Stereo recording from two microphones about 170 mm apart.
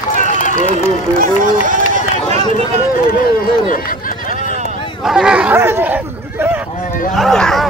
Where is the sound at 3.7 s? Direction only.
55° left (ahead or behind).